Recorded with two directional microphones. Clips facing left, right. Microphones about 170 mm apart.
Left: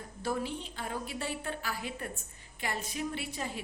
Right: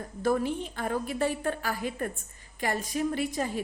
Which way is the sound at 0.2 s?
50° right (ahead or behind).